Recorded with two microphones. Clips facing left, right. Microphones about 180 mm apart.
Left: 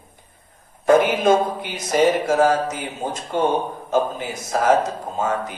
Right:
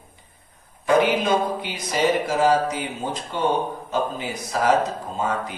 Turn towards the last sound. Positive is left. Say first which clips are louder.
# left 2 dB
turn(degrees=45)  # may be behind; listen again after turning